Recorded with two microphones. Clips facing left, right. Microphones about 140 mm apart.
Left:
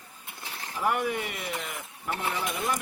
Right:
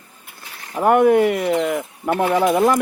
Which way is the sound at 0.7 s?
50° right (ahead or behind).